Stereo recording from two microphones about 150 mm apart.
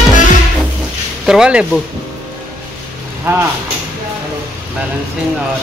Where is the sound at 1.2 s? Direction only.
5° right (ahead or behind).